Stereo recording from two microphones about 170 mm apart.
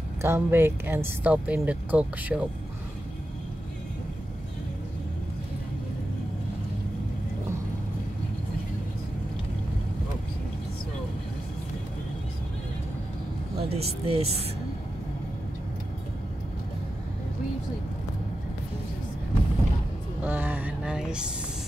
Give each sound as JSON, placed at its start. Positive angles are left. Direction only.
{"t": 0.2, "sound": "speech", "side_deg": -15}
{"t": 13.6, "sound": "speech", "side_deg": -35}
{"t": 20.2, "sound": "a sound", "side_deg": -10}